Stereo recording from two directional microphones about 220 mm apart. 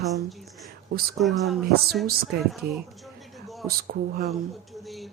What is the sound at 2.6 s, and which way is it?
Speech, centre (ahead or behind).